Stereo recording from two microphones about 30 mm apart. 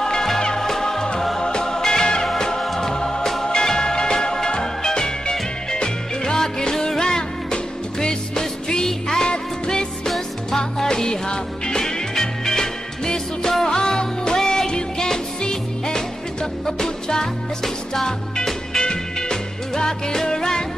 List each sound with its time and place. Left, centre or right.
0.0 s music: left
10.9 s music: left
11.8 s music: centre